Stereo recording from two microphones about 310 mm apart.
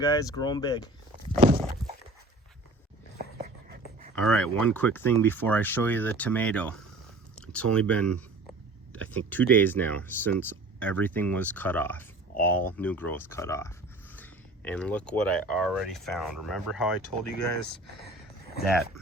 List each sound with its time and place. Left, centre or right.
0.0 s speech: centre
3.2 s dog: right
4.1 s speech: centre
16.8 s speech: left